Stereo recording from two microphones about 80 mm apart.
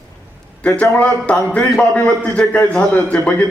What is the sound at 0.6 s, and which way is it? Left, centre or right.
A man's voice, centre.